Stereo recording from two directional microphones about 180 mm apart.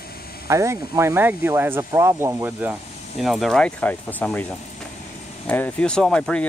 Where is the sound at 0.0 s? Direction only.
55° left (ahead or behind).